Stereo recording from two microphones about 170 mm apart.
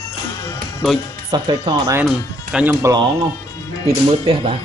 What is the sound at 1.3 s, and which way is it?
Speech, 25° right (ahead or behind).